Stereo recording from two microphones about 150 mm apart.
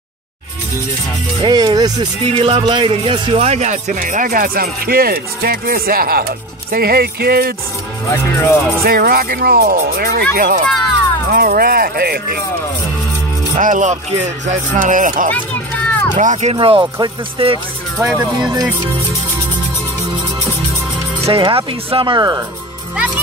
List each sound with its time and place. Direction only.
1.4 s speech: 30° right (ahead or behind); by 6.2 s 80° right
6.7 s speech: 90° right
8.1 s speech: 15° left (ahead or behind)
8.8 s speech: 85° right
10.3 s speech: 75° right (ahead or behind); by 12.4 s 90° right
13.6 s speech: 55° right (ahead or behind)
15.3 s a sound: 10° left (ahead or behind)
16.2 s speech: 50° right (ahead or behind)
16.5 s speech: 35° right (ahead or behind)
18.4 s speech: 25° right (ahead or behind)
21.3 s speech: 35° right (ahead or behind)
22.9 s a child's voice: 5° right (ahead or behind)